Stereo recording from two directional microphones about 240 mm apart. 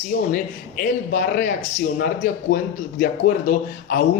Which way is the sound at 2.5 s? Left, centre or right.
Left.